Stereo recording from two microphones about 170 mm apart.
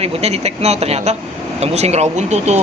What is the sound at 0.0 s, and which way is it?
Speech, 40° right (ahead or behind).